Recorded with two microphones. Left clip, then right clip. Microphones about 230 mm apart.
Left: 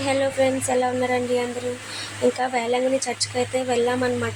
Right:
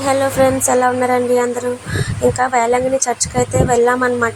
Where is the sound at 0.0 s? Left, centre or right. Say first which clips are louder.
Right 7 dB; centre.